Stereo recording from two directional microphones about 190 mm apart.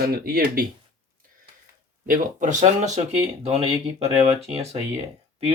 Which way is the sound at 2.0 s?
45° right (ahead or behind).